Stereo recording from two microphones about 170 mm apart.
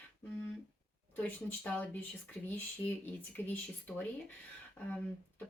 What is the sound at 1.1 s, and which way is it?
Speech, 10° left (ahead or behind).